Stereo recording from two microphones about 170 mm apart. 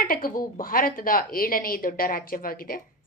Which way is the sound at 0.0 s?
55° left (ahead or behind).